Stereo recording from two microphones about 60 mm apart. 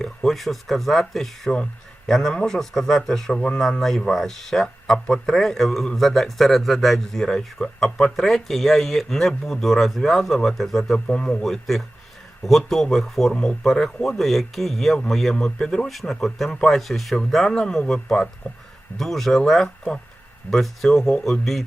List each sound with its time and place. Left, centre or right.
0.0 s a man's voice: centre
11.0 s speech: centre
11.4 s a man's voice: centre
13.3 s a man's voice: centre
19.6 s speech: centre
20.5 s a man's voice: centre